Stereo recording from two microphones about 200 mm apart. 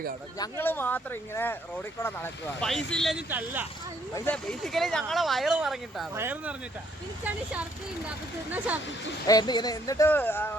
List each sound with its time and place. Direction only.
0.3 s speech: 15° left (ahead or behind)
2.6 s speech: centre (ahead or behind)
4.1 s speech: 5° left (ahead or behind)
8.0 s speech: 5° right (ahead or behind)
9.2 s speech: 20° left (ahead or behind)